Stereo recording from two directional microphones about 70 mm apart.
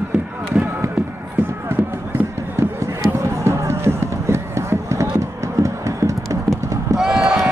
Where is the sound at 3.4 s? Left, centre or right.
Right.